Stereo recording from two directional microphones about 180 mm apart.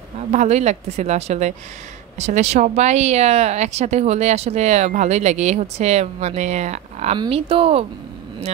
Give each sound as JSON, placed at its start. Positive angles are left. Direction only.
{"t": 0.3, "sound": "speech", "side_deg": -40}